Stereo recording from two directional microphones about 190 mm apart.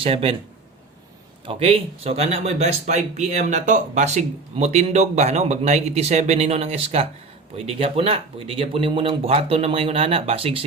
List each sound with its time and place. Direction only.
0.0 s a man's voice: 30° right (ahead or behind)
1.5 s speech: 30° right (ahead or behind)